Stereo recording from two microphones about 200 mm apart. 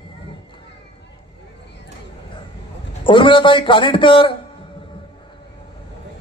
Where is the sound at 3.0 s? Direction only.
25° left (ahead or behind).